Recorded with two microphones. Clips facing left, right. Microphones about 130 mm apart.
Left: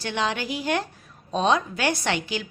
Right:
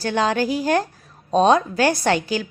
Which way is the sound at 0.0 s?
40° right (ahead or behind).